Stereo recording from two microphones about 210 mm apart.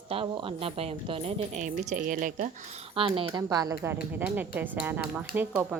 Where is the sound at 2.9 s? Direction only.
25° right (ahead or behind).